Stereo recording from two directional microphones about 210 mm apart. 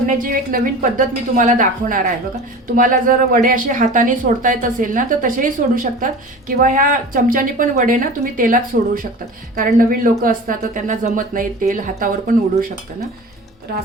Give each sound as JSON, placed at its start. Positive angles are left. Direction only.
{"t": 0.0, "sound": "a woman's voice", "side_deg": -40}